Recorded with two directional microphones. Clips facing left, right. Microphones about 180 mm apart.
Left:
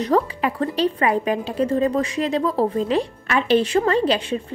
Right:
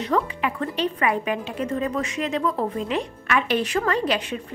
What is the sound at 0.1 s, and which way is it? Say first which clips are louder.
A woman's voice: left 3 dB; 35° left (ahead or behind).